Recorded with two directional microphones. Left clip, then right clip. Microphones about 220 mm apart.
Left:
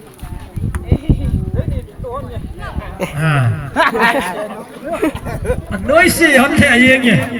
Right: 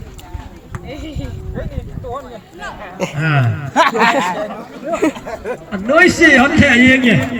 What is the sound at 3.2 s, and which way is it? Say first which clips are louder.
Speech: even; 50° left (ahead or behind).